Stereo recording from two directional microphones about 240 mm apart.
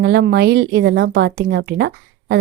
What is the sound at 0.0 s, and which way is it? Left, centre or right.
Speech, right.